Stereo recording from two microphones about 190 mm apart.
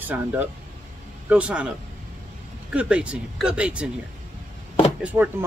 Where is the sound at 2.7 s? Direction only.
5° right (ahead or behind).